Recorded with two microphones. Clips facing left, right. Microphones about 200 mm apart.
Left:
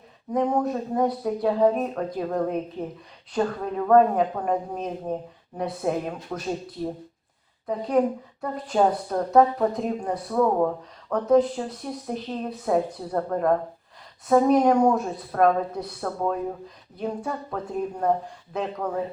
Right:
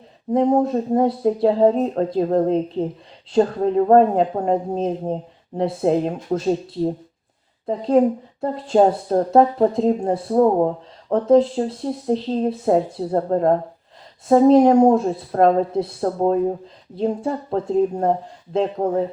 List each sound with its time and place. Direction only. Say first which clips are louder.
0.3 s speech: right 6 dB; 25° right (ahead or behind)